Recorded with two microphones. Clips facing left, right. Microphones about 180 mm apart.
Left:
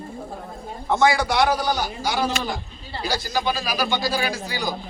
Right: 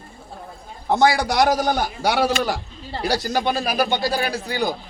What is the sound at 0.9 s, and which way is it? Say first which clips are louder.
A man's voice: right 2 dB; 35° right (ahead or behind).